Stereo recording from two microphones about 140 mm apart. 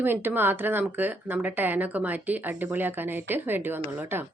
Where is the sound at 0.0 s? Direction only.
15° right (ahead or behind).